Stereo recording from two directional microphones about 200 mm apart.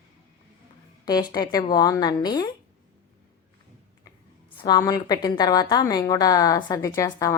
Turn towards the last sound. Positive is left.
turn(degrees=15)  # may be behind; listen again after turning